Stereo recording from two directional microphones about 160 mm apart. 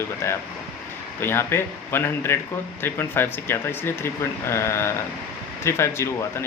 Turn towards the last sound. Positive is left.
turn(degrees=15)  # may be behind; listen again after turning